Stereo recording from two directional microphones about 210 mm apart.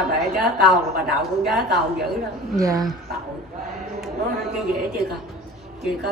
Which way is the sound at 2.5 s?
15° right (ahead or behind).